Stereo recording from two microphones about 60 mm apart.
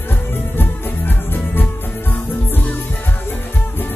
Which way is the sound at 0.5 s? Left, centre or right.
Left.